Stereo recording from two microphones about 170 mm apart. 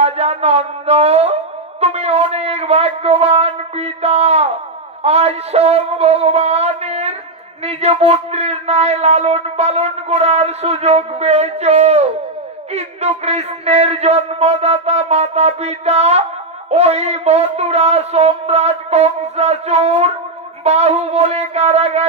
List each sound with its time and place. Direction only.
0.0 s a sound: 35° right (ahead or behind)
1.8 s wind instrument: 35° right (ahead or behind)
5.0 s music: 40° right (ahead or behind)
7.6 s a man's voice: 35° right (ahead or behind)